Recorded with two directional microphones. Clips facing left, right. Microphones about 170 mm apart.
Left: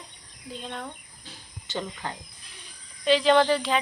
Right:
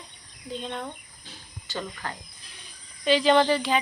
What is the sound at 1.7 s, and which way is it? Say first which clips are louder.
Speech: left 1 dB; 25° left (ahead or behind).